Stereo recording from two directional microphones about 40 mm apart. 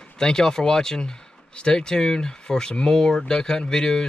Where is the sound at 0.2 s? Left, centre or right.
Centre.